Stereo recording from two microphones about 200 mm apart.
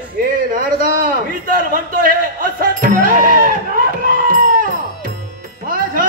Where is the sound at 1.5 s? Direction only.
45° right (ahead or behind).